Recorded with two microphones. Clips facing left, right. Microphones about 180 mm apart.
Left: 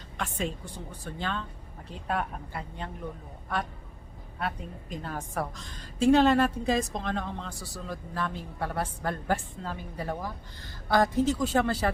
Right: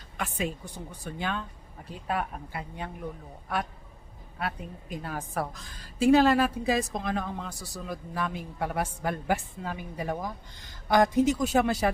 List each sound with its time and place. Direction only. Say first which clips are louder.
0.2 s a woman's voice: right 1 dB; 10° right (ahead or behind)
4.4 s a woman's voice: even; 5° right (ahead or behind)